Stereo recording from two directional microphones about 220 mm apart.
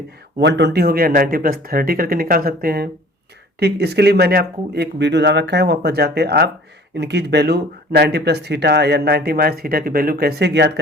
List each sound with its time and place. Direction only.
0.3 s speech: 50° right (ahead or behind)